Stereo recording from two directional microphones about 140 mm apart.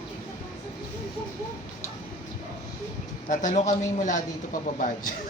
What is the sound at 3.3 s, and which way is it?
Speech, 60° left (ahead or behind).